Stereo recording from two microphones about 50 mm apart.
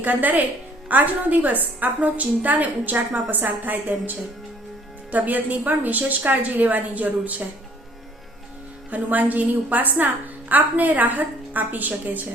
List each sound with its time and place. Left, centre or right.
0.0 s a woman's voice: right
8.9 s a woman's voice: right